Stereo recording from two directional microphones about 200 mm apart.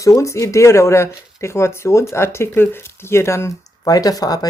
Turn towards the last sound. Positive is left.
turn(degrees=20)  # may be behind; listen again after turning